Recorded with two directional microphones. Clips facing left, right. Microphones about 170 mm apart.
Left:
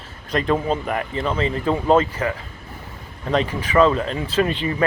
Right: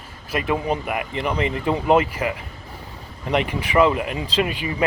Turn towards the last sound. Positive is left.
turn(degrees=-10)  # may be behind; listen again after turning